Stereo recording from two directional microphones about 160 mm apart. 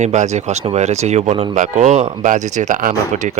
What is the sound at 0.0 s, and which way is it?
Speech, 45° right (ahead or behind).